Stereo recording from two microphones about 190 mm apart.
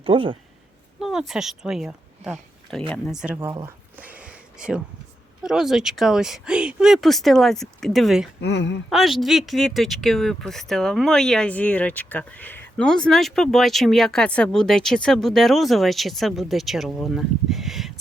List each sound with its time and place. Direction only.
0.0 s speech: 25° right (ahead or behind)
0.9 s speech: centre (ahead or behind)
8.4 s speech: 65° left (ahead or behind)
8.9 s speech: centre (ahead or behind)